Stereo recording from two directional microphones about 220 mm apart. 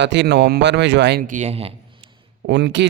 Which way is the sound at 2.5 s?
55° right (ahead or behind).